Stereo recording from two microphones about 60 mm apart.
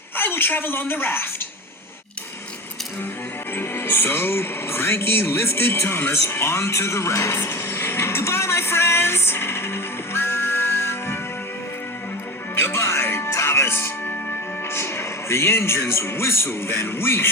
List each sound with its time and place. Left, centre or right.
0.2 s speech: left
3.5 s speech: left
12.5 s music: left
15.9 s speech: left